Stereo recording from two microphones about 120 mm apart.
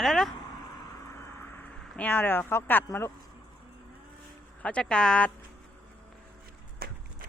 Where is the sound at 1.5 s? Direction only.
15° left (ahead or behind).